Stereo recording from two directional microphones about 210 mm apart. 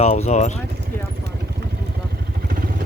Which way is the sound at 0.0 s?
30° left (ahead or behind).